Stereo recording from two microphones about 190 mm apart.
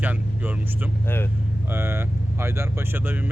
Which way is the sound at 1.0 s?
10° left (ahead or behind).